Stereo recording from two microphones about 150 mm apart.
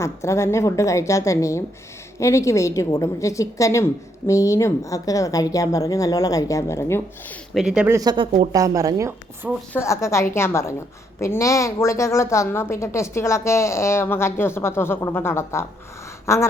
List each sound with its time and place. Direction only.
0.0 s a woman's voice: 20° left (ahead or behind)
7.5 s speech: 5° right (ahead or behind)
7.9 s a woman's voice: 20° right (ahead or behind)
9.7 s a woman's voice: 20° left (ahead or behind)
16.2 s a sound: 20° left (ahead or behind)